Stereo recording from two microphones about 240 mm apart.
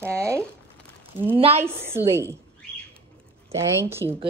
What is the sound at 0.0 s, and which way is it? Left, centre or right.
Speech, centre.